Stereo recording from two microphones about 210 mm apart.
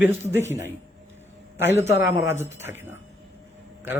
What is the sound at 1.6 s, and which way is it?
Speech, 10° right (ahead or behind).